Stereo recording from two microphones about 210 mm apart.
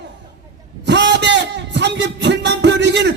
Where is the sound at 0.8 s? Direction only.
55° right (ahead or behind).